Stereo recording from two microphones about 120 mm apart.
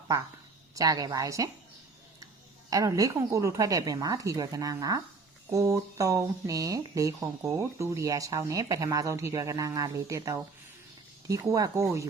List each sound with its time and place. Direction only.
0.8 s speech: 30° right (ahead or behind)